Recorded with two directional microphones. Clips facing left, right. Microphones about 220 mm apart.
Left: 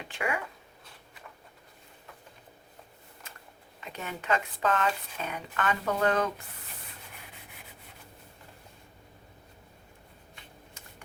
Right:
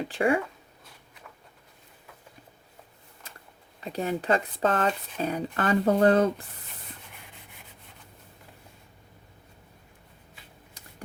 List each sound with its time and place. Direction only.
0.0 s speech: 35° right (ahead or behind)
3.8 s speech: 35° right (ahead or behind)